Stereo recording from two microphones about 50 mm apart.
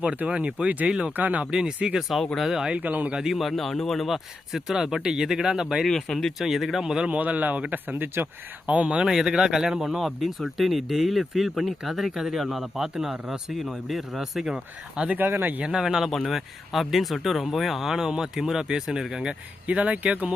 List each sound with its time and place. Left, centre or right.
0.3 s speech: right
2.0 s speech: centre
2.7 s speech: right
3.1 s speech: centre
3.3 s speech: centre
4.1 s speech: centre
6.1 s speech: centre
6.4 s speech: centre
7.1 s speech: right
8.6 s speech: right
9.0 s speech: centre
15.1 s speech: right
15.6 s speech: centre